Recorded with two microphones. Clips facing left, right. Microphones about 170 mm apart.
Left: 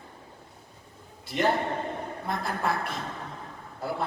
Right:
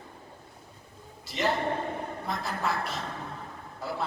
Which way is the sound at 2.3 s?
55° left (ahead or behind).